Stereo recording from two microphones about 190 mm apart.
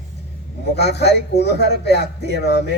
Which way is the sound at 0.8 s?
60° left (ahead or behind).